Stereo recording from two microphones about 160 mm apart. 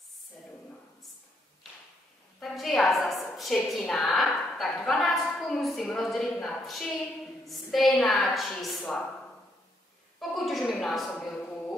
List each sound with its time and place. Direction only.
2.4 s a woman's voice: centre (ahead or behind)
10.3 s a woman's voice: centre (ahead or behind)
10.6 s a woman's voice: 10° left (ahead or behind)